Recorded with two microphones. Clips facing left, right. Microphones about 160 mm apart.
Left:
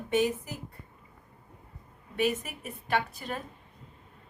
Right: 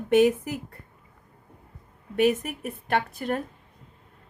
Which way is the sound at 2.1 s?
55° right (ahead or behind).